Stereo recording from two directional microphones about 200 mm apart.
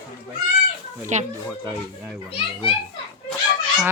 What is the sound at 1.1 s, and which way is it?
Speech, 35° right (ahead or behind).